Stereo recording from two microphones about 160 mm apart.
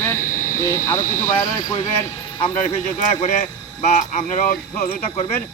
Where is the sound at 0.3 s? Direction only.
55° left (ahead or behind).